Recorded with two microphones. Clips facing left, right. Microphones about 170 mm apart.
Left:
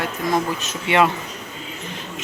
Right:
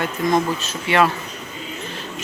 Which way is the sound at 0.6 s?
20° left (ahead or behind).